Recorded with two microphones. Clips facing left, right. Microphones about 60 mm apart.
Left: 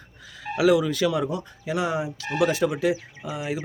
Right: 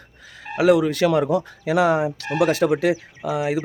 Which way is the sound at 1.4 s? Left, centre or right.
Right.